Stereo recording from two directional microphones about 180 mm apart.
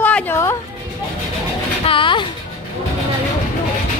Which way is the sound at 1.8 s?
30° left (ahead or behind).